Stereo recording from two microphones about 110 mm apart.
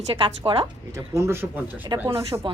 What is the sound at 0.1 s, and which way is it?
Speech, 55° right (ahead or behind).